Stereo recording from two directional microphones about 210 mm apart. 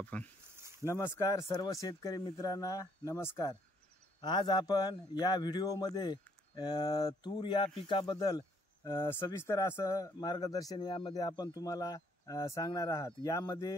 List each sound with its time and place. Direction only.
0.0 s a man's voice: 5° left (ahead or behind)